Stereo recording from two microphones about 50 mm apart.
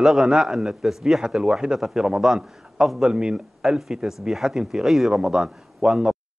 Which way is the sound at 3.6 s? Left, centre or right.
Centre.